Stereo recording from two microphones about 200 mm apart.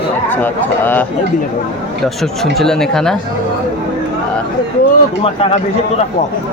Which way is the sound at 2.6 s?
Centre (ahead or behind).